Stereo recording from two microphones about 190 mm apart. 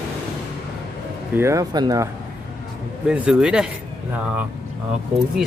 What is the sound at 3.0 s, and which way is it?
Speech, 5° right (ahead or behind).